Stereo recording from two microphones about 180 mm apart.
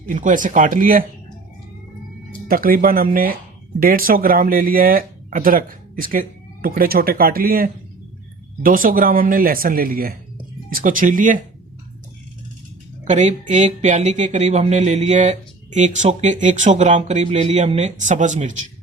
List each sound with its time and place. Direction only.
0.1 s speech: 45° right (ahead or behind)
2.5 s speech: 55° right (ahead or behind)
13.1 s speech: 40° right (ahead or behind)